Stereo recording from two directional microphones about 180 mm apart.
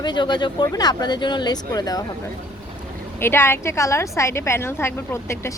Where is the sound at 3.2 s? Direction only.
15° left (ahead or behind).